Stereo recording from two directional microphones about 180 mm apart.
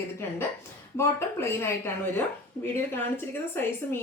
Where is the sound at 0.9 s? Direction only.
15° left (ahead or behind).